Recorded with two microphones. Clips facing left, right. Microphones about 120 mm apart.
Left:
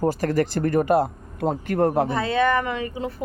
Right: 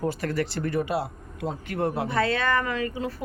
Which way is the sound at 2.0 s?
20° left (ahead or behind).